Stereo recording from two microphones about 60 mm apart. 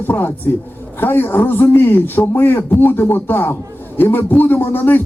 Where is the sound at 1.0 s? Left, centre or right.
Left.